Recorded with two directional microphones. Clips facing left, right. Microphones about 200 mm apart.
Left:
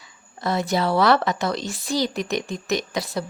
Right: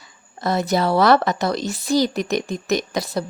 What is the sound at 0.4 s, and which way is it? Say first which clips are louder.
A woman's voice: right 3 dB; 40° right (ahead or behind).